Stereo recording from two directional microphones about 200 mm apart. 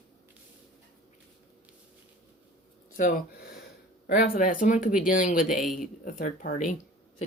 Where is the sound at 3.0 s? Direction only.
40° left (ahead or behind).